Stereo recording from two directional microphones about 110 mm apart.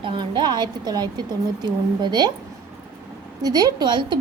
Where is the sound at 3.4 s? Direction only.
35° right (ahead or behind).